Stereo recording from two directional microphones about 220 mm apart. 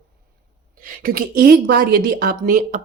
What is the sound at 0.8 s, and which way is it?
Speech, 40° right (ahead or behind).